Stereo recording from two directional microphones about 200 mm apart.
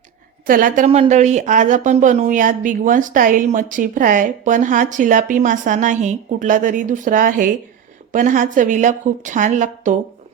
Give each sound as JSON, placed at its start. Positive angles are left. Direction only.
{"t": 0.4, "sound": "a woman's voice", "side_deg": -45}